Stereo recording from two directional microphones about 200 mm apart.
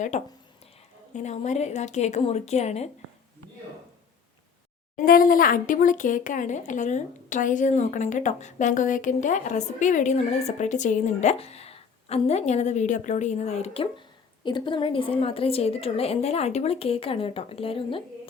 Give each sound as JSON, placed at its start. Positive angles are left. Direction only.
{"t": 0.1, "sound": "speech", "side_deg": 35}
{"t": 5.0, "sound": "a woman's voice", "side_deg": 45}